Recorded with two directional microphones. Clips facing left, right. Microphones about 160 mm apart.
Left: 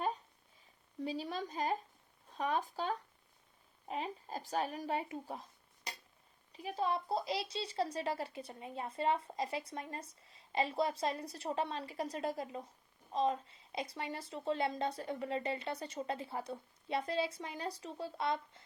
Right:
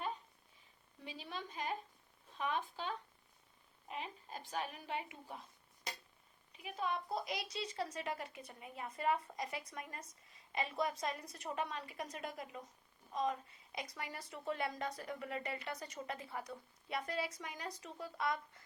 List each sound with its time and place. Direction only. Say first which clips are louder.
1.0 s a woman's voice: left 8 dB; 35° left (ahead or behind)
6.5 s a woman's voice: left 5 dB; 35° left (ahead or behind)